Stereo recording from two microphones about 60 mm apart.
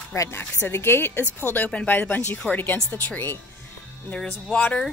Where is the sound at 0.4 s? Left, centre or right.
Left.